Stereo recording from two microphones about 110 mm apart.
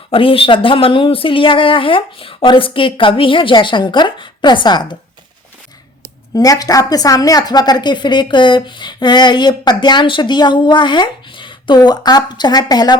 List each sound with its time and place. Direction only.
0.1 s speech: 55° left (ahead or behind)
6.3 s a woman's voice: 35° left (ahead or behind)